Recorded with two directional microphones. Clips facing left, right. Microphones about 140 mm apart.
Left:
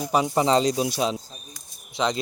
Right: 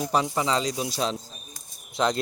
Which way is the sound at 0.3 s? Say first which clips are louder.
Left 5 dB; 25° left (ahead or behind).